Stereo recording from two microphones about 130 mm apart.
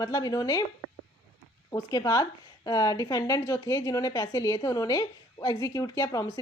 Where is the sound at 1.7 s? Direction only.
25° left (ahead or behind).